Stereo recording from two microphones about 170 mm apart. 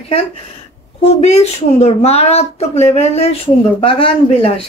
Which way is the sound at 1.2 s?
40° left (ahead or behind).